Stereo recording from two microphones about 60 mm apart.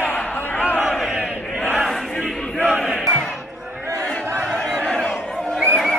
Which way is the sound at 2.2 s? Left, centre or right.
Centre.